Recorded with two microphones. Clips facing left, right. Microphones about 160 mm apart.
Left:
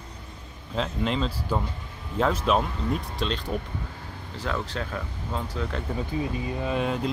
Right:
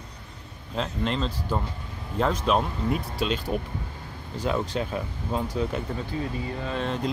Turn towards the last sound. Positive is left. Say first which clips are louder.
# left 2 dB
turn(degrees=5)  # may be behind; listen again after turning